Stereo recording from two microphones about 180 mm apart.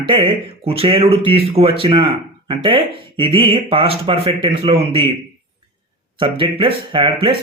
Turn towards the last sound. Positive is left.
turn(degrees=-30)  # may be behind; listen again after turning